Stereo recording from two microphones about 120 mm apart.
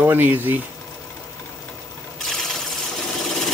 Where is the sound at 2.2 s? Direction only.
Centre (ahead or behind).